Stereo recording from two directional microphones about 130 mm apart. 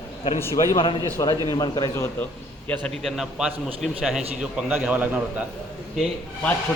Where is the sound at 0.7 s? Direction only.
40° left (ahead or behind).